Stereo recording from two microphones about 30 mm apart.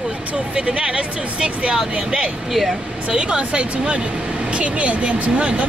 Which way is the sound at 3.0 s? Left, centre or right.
Right.